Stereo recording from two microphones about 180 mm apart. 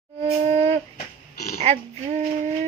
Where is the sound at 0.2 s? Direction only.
35° right (ahead or behind).